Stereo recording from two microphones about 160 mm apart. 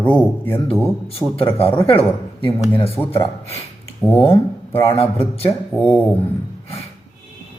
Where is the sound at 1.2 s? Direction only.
Centre (ahead or behind).